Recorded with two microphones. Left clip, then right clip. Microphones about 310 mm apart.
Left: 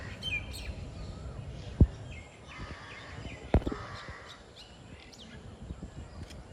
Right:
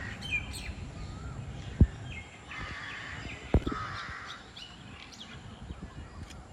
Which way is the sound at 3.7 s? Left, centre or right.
Left.